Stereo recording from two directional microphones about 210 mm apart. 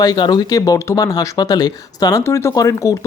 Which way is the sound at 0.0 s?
20° left (ahead or behind).